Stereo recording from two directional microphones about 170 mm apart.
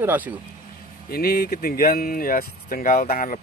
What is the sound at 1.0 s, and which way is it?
Speech, 65° left (ahead or behind).